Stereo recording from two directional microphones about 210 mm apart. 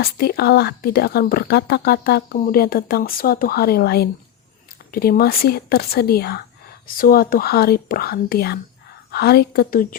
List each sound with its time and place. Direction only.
0.0 s speech: 45° left (ahead or behind)